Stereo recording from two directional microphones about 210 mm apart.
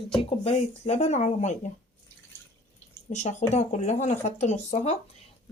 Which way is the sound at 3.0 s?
35° left (ahead or behind).